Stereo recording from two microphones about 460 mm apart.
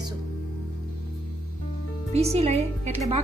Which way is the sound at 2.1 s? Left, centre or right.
Centre.